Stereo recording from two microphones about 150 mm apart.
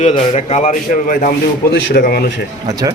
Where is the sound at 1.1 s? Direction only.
65° left (ahead or behind); by 2.3 s 90° left.